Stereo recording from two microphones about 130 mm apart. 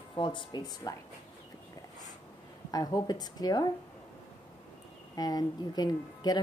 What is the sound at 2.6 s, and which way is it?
Speech, 30° left (ahead or behind).